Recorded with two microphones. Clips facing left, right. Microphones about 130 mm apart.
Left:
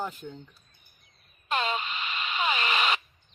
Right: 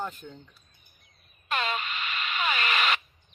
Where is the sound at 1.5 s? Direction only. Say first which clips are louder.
Left 1 dB; 25° left (ahead or behind).